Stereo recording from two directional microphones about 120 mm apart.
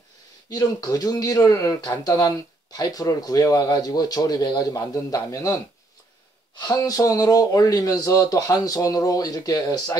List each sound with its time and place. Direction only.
0.5 s speech: 35° left (ahead or behind)